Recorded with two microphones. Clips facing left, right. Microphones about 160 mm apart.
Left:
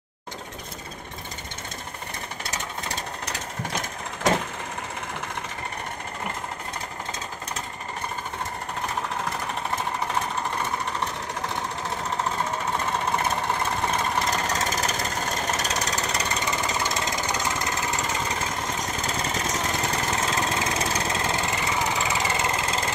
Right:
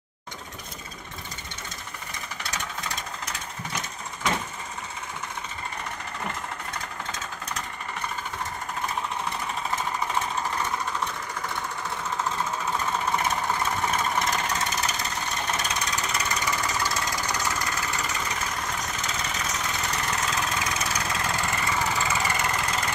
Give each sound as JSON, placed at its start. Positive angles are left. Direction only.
{"t": 3.3, "sound": "vehicle", "side_deg": 80}
{"t": 13.8, "sound": "vehicle", "side_deg": 35}
{"t": 15.6, "sound": "engine", "side_deg": 40}
{"t": 18.8, "sound": "vehicle", "side_deg": 35}
{"t": 19.5, "sound": "engine", "side_deg": 40}